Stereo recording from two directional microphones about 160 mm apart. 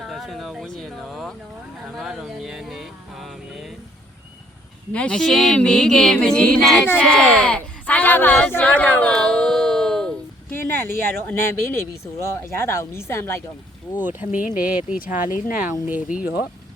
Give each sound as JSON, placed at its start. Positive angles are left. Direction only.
{"t": 0.0, "sound": "speech", "side_deg": 0}
{"t": 4.9, "sound": "speech", "side_deg": 5}
{"t": 10.5, "sound": "speech", "side_deg": 15}
{"t": 14.0, "sound": "speech", "side_deg": -10}
{"t": 14.9, "sound": "speech", "side_deg": 60}
{"t": 15.7, "sound": "speech", "side_deg": -10}